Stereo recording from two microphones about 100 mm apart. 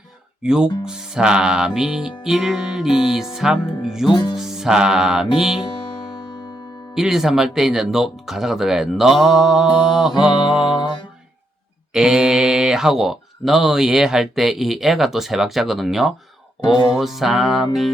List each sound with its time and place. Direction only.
0.4 s speech: 5° right (ahead or behind)
4.1 s music: 50° left (ahead or behind)
4.4 s speech: 5° right (ahead or behind)
6.9 s speech: 5° right (ahead or behind)
10.8 s music: 50° left (ahead or behind)
11.9 s speech: 5° right (ahead or behind)
16.6 s music: 50° left (ahead or behind)
17.0 s speech: 5° right (ahead or behind)